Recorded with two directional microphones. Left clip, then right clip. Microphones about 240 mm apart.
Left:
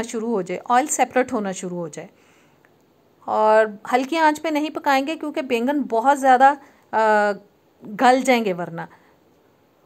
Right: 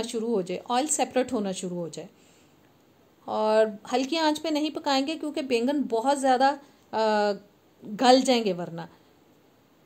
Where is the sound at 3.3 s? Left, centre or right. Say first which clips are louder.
Left 7 dB; centre.